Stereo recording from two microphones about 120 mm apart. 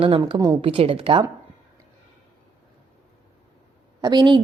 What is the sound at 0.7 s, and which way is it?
Speech, 50° right (ahead or behind).